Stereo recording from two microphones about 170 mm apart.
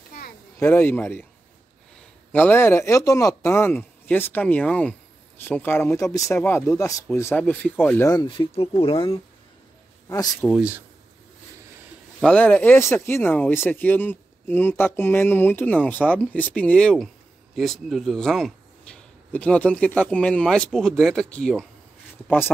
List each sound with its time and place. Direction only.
0.6 s speech: 10° left (ahead or behind)
2.3 s speech: 10° left (ahead or behind)
8.1 s speech: 25° left (ahead or behind)
10.0 s speech: 20° left (ahead or behind)
10.5 s speech: 5° right (ahead or behind)
12.2 s speech: 5° left (ahead or behind)